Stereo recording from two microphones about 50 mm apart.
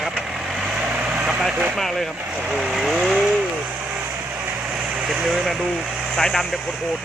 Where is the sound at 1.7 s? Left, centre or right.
Centre.